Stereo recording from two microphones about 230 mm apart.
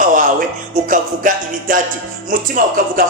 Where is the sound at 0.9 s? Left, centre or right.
Right.